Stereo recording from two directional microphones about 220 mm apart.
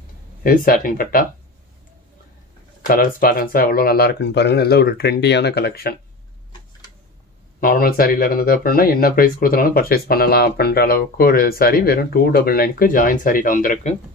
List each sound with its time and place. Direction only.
0.4 s speech: 40° left (ahead or behind)
2.9 s speech: 40° left (ahead or behind)
7.6 s speech: 40° left (ahead or behind)